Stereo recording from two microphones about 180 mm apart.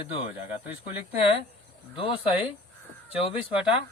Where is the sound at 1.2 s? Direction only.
30° left (ahead or behind).